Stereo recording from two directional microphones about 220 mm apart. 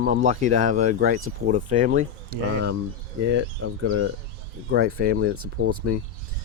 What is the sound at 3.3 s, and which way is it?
Speech, 60° right (ahead or behind).